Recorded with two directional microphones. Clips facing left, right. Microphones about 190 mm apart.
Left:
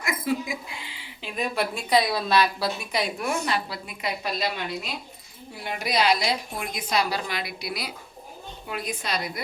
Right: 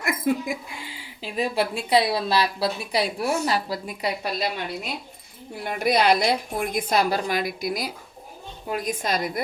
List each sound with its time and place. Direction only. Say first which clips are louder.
0.0 s speech: right 3 dB; 55° right (ahead or behind); by 4.4 s 35° right (ahead or behind)
5.6 s a woman's voice: right 4 dB; 55° right (ahead or behind)